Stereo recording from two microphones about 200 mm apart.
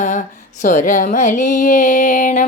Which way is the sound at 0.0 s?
40° left (ahead or behind).